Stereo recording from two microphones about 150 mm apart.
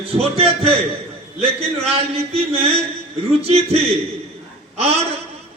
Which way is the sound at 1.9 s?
40° right (ahead or behind).